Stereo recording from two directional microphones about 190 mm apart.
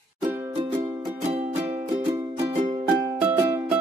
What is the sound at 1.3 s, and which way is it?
Music, 30° right (ahead or behind).